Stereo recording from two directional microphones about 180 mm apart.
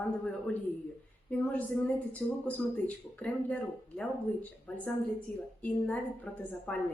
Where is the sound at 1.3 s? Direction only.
10° left (ahead or behind).